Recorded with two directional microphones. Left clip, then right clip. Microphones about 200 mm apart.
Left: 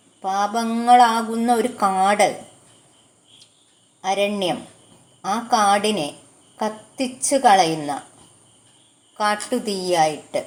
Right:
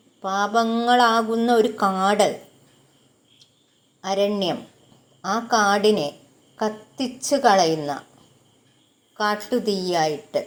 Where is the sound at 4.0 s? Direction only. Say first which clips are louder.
Left 1 dB; 15° right (ahead or behind).